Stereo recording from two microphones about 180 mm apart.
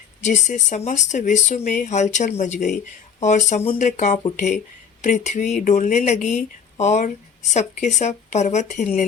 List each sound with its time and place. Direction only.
0.2 s speech: 40° left (ahead or behind)